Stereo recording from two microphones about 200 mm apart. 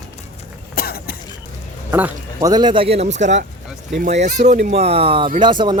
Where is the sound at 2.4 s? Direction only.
20° right (ahead or behind).